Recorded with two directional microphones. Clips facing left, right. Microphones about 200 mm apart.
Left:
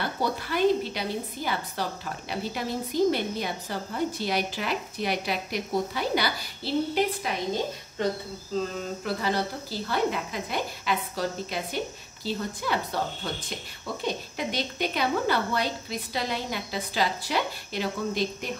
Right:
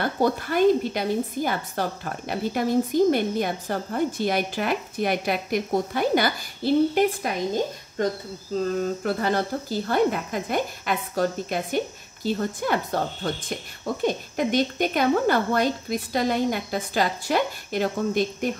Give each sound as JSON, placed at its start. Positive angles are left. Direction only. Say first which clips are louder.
{"t": 0.0, "sound": "a woman's voice", "louder": "right 6 dB", "side_deg": -50}
{"t": 9.0, "sound": "a woman's voice", "louder": "right 4 dB", "side_deg": -50}